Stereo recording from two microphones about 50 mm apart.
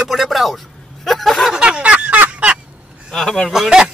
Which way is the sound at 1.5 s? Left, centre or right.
Centre.